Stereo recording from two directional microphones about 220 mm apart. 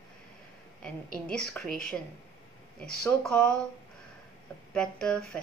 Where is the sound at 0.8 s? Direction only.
5° left (ahead or behind).